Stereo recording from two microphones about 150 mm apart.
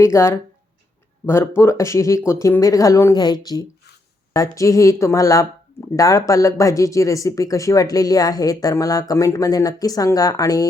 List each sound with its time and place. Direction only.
0.0 s speech: 20° left (ahead or behind)